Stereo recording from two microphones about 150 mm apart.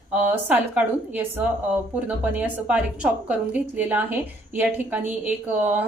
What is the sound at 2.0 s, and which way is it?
A woman's voice, 10° right (ahead or behind).